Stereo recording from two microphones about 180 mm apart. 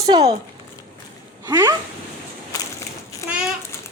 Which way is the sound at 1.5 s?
10° right (ahead or behind).